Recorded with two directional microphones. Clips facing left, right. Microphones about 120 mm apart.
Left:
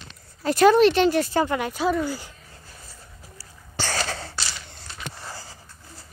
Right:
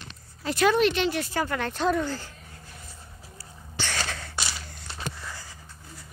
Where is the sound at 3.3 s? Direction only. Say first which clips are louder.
Left 3 dB; 35° left (ahead or behind).